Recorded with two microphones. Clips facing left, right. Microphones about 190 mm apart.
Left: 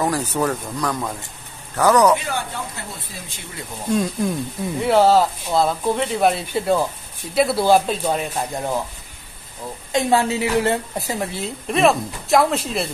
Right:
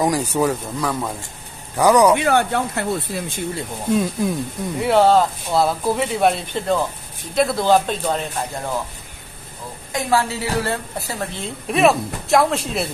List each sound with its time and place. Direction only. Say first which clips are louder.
0.0 s speech: right 2 dB; 15° right (ahead or behind)
2.1 s speech: right 8 dB; 65° right (ahead or behind)
3.8 s a man's voice: right 1 dB; centre (ahead or behind)
9.9 s a woman's voice: left 2 dB; 25° left (ahead or behind)
11.4 s speech: right 1 dB; centre (ahead or behind)